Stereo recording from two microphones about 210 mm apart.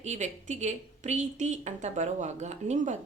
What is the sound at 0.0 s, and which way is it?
A woman's voice, 35° right (ahead or behind).